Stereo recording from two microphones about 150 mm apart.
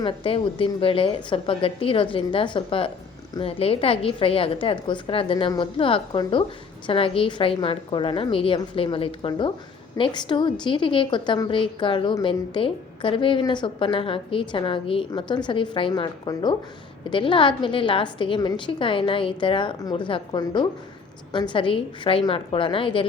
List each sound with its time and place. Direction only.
0.0 s a woman's voice: 35° left (ahead or behind)